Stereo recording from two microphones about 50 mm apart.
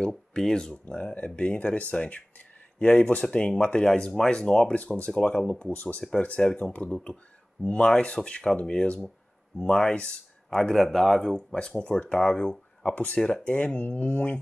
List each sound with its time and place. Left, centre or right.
0.3 s speech: centre
4.7 s speech: left
10.7 s a man's voice: centre
11.5 s speech: centre
12.9 s speech: left